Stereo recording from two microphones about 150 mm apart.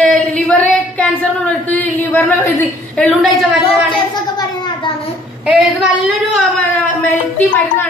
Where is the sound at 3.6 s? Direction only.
30° left (ahead or behind).